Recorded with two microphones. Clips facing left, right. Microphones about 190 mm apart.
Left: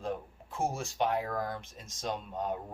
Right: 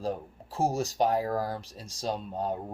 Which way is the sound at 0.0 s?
35° right (ahead or behind).